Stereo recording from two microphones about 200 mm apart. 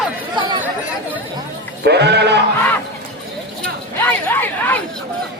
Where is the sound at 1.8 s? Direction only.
55° right (ahead or behind).